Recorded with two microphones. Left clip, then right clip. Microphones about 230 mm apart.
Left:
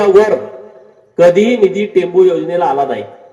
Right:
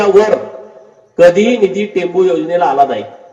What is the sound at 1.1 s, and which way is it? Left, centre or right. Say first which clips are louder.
A man's voice: right 1 dB; left.